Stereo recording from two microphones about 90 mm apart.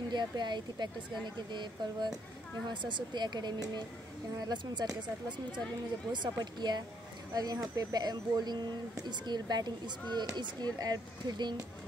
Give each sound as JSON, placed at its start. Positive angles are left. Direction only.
{"t": 0.1, "sound": "speech", "side_deg": -55}
{"t": 6.1, "sound": "speech", "side_deg": -55}